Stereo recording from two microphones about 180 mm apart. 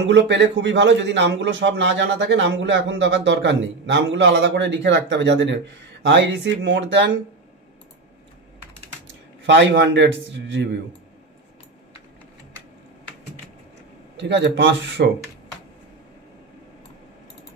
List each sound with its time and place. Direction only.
0.0 s a man's voice: 85° right
9.5 s a man's voice: 75° right (ahead or behind)
14.1 s a man's voice: 80° right